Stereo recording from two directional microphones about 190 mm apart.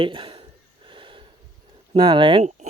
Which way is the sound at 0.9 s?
25° right (ahead or behind).